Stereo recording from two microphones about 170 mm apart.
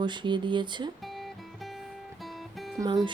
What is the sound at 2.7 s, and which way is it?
Speech, 20° right (ahead or behind).